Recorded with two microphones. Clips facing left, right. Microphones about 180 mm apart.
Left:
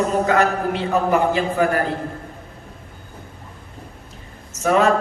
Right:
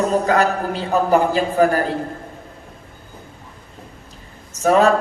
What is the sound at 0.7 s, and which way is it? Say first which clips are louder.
Speech: right 4 dB; 35° right (ahead or behind).